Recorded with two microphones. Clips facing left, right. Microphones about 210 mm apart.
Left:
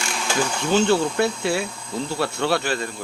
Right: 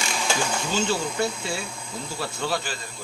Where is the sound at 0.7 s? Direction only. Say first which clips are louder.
Left 8 dB; 60° left (ahead or behind).